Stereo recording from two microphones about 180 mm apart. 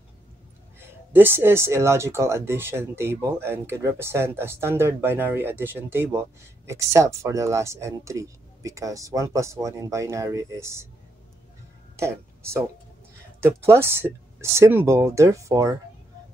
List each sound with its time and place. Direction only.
0.7 s speech: 10° right (ahead or behind)
12.0 s speech: 15° right (ahead or behind)